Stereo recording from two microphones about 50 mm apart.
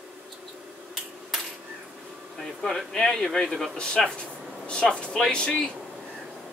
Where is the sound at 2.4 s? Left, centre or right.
Centre.